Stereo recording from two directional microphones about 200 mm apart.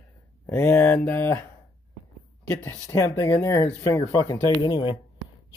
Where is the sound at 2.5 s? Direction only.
15° left (ahead or behind).